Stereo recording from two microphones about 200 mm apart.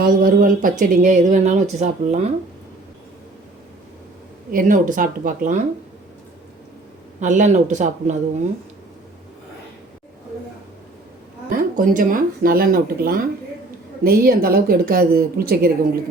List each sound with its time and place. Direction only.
0.0 s speech: 45° right (ahead or behind)
4.5 s speech: 40° right (ahead or behind)
7.2 s speech: 40° right (ahead or behind)
11.5 s speech: 40° right (ahead or behind)